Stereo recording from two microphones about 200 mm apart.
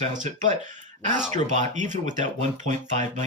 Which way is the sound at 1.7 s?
35° right (ahead or behind).